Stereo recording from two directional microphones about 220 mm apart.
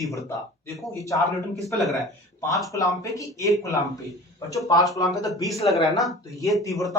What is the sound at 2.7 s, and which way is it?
Speech, 15° left (ahead or behind).